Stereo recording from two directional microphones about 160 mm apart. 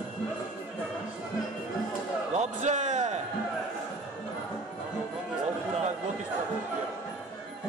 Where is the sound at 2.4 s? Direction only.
50° right (ahead or behind).